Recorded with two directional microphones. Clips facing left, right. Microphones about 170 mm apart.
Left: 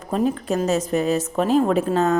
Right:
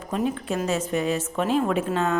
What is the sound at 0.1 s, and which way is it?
A woman's voice, 40° left (ahead or behind).